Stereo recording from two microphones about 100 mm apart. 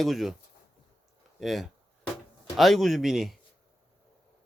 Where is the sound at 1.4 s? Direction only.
Centre (ahead or behind).